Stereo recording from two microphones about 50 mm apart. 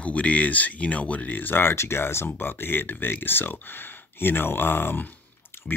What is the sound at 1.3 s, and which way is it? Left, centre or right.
Speech, left.